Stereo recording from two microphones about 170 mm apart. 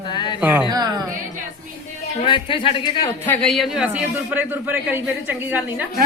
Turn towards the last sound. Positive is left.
turn(degrees=-10)  # may be behind; listen again after turning